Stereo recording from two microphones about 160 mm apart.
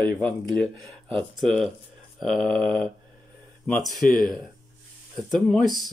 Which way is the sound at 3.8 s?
Centre (ahead or behind).